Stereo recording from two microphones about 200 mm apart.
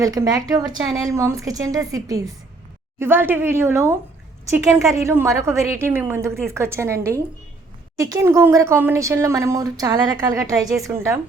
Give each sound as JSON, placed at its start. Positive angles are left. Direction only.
{"t": 0.0, "sound": "speech", "side_deg": -20}
{"t": 5.0, "sound": "speech", "side_deg": -15}